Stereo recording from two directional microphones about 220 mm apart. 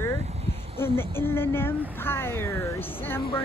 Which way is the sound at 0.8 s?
10° left (ahead or behind).